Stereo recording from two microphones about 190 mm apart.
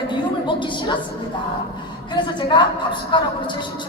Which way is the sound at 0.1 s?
25° left (ahead or behind).